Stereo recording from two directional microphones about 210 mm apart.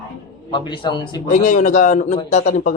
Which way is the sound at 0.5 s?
20° left (ahead or behind).